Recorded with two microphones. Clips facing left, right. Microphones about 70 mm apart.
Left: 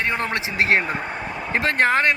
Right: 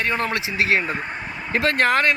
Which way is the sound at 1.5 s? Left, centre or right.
Left.